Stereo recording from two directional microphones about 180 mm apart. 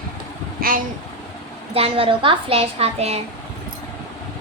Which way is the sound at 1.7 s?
30° right (ahead or behind).